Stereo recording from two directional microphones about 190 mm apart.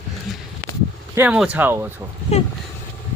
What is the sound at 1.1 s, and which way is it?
Speech, 10° right (ahead or behind).